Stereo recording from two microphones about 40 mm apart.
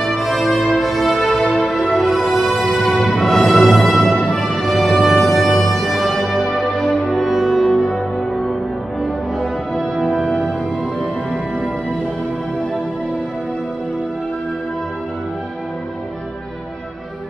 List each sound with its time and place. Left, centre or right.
0.0 s music: centre
1.2 s music: centre
1.5 s music: centre
2.7 s music: left
3.2 s music: centre
4.5 s music: left
5.0 s music: centre
7.0 s music: left
7.2 s music: centre